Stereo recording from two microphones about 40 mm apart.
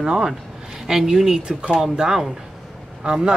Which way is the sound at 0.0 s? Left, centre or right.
Centre.